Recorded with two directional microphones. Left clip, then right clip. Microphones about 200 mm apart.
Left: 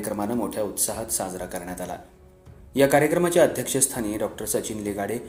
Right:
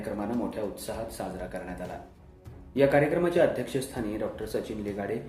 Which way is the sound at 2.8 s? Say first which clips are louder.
Left 4 dB; 40° left (ahead or behind).